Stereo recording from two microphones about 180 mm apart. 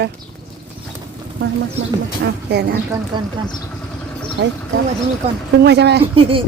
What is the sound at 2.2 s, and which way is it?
Speech, 65° right (ahead or behind).